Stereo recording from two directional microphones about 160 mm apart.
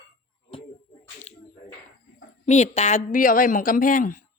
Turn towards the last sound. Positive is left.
turn(degrees=55)  # may be behind; listen again after turning